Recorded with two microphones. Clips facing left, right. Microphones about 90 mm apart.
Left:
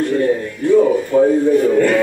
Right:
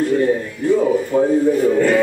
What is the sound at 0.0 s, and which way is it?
Speech, 5° right (ahead or behind).